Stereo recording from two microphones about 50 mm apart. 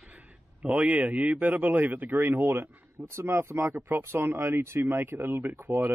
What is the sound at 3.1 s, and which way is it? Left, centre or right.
Speech, right.